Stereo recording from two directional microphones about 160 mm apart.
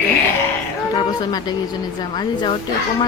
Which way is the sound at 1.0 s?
25° left (ahead or behind).